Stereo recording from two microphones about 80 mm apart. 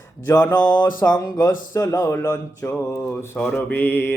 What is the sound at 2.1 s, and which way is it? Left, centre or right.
Mantra, left.